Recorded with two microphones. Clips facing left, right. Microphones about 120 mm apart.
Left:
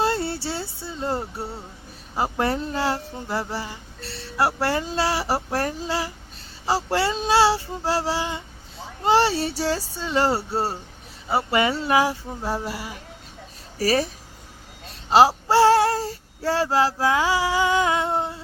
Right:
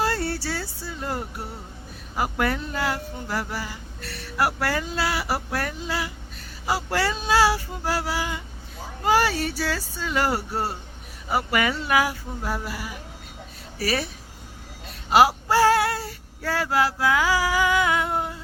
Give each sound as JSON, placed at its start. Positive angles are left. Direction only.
{"t": 0.0, "sound": "speech", "side_deg": 25}
{"t": 15.1, "sound": "female singing", "side_deg": 30}